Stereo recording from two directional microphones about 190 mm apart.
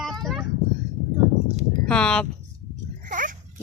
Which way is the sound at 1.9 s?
5° left (ahead or behind).